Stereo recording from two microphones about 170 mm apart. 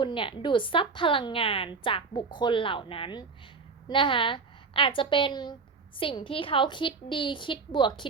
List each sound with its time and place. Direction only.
0.0 s a woman's voice: 30° left (ahead or behind)